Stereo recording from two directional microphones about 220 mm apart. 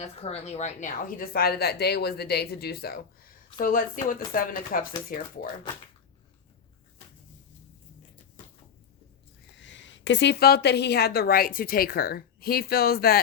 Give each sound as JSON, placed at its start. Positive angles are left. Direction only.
{"t": 0.0, "sound": "a woman's voice", "side_deg": 30}
{"t": 9.6, "sound": "a woman's voice", "side_deg": 55}